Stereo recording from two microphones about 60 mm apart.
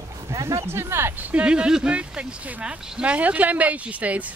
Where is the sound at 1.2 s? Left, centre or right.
Right.